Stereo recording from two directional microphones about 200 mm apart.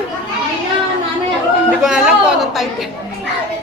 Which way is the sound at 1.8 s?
Centre (ahead or behind).